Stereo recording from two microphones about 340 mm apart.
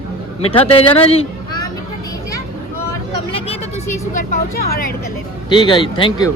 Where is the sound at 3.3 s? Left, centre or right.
Centre.